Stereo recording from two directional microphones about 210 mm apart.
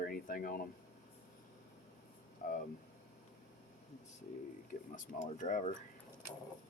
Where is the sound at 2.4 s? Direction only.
40° left (ahead or behind).